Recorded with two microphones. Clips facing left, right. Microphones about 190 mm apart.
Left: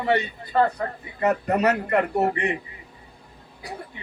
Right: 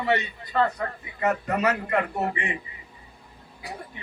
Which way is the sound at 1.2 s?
35° left (ahead or behind).